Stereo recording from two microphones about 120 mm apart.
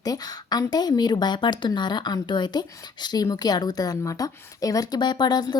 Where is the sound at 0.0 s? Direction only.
35° left (ahead or behind).